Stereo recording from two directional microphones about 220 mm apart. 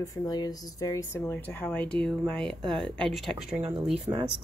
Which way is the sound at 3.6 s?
25° right (ahead or behind).